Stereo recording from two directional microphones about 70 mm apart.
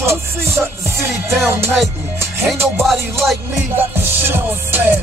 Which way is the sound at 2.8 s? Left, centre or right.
Centre.